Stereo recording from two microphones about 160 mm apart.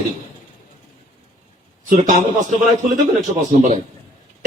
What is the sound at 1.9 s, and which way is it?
A man's voice, 45° right (ahead or behind).